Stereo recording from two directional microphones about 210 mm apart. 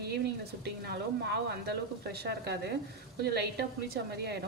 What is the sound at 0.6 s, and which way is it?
Speech, 55° right (ahead or behind).